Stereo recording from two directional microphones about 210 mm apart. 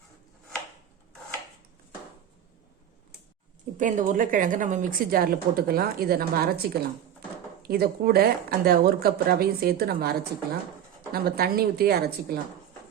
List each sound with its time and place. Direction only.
3.8 s a woman's voice: 40° right (ahead or behind)
7.7 s speech: 45° right (ahead or behind)